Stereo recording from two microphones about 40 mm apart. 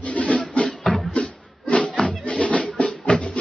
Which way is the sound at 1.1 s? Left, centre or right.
Left.